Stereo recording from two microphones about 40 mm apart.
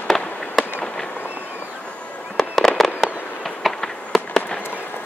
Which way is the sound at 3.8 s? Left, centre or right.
Centre.